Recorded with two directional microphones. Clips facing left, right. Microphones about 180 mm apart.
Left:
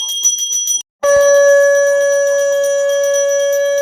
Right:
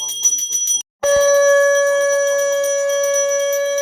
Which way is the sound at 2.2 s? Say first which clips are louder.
Left 4 dB; 50° left (ahead or behind).